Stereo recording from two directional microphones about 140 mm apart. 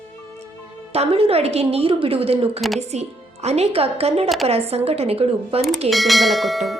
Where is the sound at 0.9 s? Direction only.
45° right (ahead or behind).